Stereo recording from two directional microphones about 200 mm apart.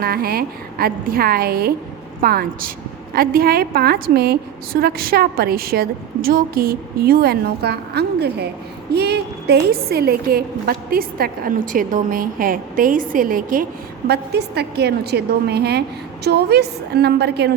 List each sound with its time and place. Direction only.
0.0 s a woman's voice: 50° right (ahead or behind)